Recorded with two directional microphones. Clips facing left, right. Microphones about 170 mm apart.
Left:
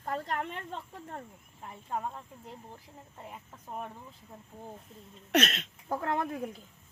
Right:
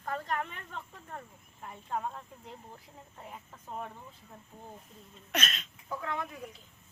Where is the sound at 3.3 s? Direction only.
10° left (ahead or behind).